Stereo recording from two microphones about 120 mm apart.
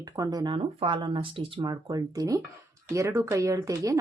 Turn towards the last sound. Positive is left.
turn(degrees=-25)  # may be behind; listen again after turning